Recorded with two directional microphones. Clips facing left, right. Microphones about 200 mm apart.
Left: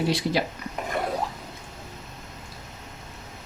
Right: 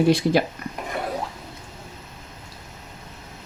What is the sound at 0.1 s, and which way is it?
Speech, 50° right (ahead or behind).